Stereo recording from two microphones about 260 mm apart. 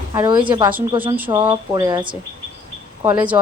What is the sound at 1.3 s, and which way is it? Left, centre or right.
Speech, centre.